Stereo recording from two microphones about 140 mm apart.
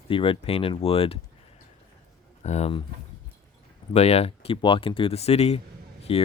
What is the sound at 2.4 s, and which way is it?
Speech, 55° left (ahead or behind).